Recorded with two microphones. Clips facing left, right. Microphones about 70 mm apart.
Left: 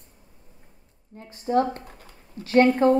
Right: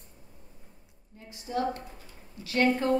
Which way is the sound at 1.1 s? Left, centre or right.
Left.